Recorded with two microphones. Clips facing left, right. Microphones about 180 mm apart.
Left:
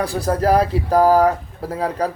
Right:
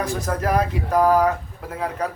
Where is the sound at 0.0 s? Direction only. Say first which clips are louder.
Left 5 dB; 35° left (ahead or behind).